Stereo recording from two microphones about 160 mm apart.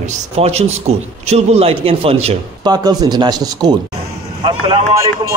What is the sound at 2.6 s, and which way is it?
Speech, 25° right (ahead or behind).